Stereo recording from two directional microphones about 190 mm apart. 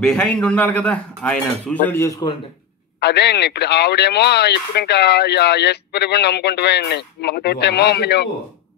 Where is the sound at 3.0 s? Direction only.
60° left (ahead or behind).